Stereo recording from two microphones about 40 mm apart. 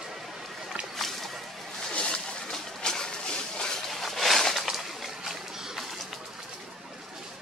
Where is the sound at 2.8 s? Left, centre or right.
Centre.